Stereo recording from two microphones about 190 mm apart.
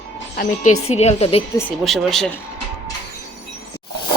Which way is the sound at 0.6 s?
40° left (ahead or behind).